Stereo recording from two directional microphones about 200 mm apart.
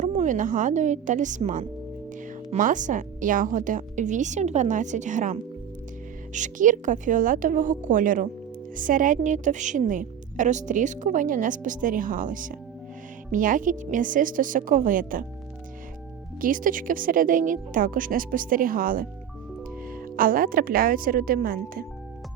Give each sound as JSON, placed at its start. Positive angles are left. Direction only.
{"t": 0.0, "sound": "a woman's voice", "side_deg": -40}
{"t": 16.4, "sound": "a woman's voice", "side_deg": -45}
{"t": 20.1, "sound": "a woman's voice", "side_deg": -45}